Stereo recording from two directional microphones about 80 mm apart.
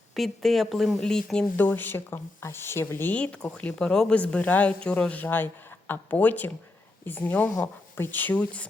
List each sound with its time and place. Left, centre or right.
0.1 s speech: centre
1.5 s speech: left